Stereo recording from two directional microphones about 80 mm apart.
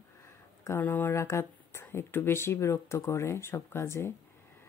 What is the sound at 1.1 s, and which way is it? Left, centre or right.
Speech, left.